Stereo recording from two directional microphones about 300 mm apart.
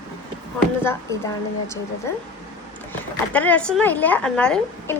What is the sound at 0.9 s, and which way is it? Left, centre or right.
Speech, centre.